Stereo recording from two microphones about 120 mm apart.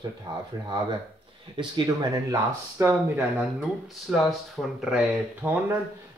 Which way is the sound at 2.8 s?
15° right (ahead or behind).